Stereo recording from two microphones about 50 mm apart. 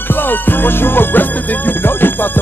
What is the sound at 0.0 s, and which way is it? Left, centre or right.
Music, left.